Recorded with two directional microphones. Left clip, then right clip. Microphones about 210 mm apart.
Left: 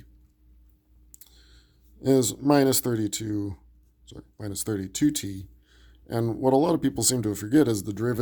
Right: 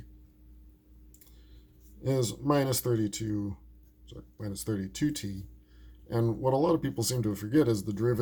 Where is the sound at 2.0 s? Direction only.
50° left (ahead or behind).